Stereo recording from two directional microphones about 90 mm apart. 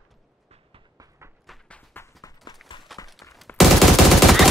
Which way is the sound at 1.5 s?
Centre (ahead or behind).